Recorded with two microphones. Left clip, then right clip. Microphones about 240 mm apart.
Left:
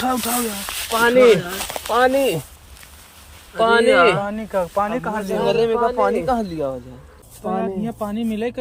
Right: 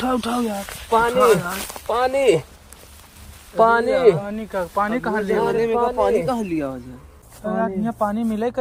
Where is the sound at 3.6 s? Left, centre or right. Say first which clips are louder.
Left 1 dB; right.